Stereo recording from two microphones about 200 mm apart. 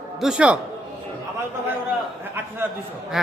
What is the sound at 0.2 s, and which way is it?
Speech, 5° right (ahead or behind).